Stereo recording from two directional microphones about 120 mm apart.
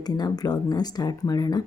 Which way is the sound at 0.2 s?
35° left (ahead or behind).